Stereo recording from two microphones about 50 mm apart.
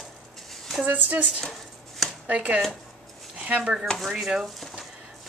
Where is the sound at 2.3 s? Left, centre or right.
Right.